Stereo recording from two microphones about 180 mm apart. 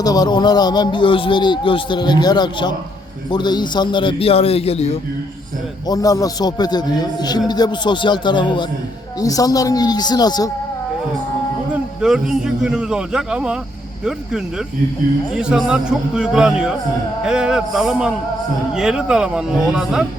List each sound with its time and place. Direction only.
0.0 s a man's voice: 20° left (ahead or behind)
5.9 s speech: 20° left (ahead or behind)
11.7 s a man's voice: 5° right (ahead or behind)
15.3 s a man's voice: 5° right (ahead or behind)